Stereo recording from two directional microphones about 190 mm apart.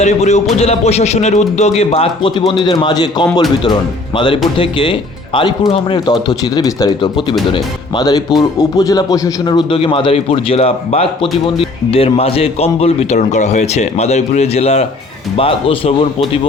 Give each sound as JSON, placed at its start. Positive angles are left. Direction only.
{"t": 0.0, "sound": "speech", "side_deg": 35}